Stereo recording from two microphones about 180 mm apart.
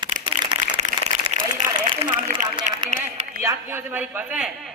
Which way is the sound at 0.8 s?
45° right (ahead or behind).